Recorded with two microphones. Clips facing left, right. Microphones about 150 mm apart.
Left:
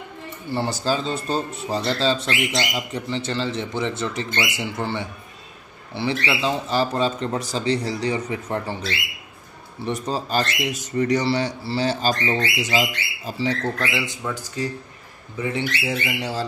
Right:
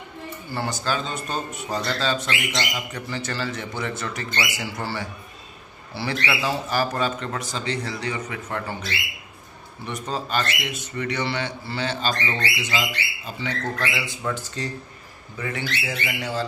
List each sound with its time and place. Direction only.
0.5 s speech: 30° left (ahead or behind)
9.8 s speech: 35° left (ahead or behind)
14.2 s speech: 10° left (ahead or behind)
15.3 s speech: 20° left (ahead or behind)